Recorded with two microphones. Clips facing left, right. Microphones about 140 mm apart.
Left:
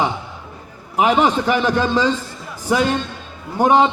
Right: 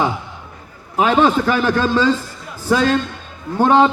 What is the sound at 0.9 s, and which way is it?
A man's voice, 15° left (ahead or behind).